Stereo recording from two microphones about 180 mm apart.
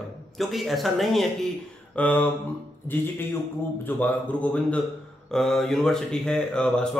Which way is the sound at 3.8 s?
10° left (ahead or behind).